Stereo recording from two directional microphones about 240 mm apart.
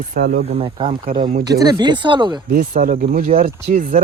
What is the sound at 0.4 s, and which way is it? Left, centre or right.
Speech, right.